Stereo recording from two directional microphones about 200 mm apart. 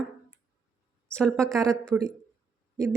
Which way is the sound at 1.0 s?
5° left (ahead or behind).